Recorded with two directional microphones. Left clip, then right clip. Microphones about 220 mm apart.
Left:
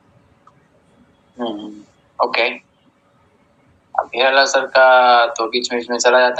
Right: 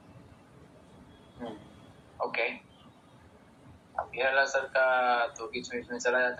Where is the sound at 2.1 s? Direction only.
45° left (ahead or behind).